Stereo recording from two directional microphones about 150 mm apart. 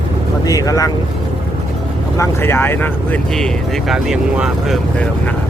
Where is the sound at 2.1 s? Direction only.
15° left (ahead or behind); by 4.8 s 5° right (ahead or behind).